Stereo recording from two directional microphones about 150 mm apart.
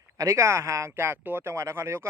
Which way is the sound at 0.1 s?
20° right (ahead or behind).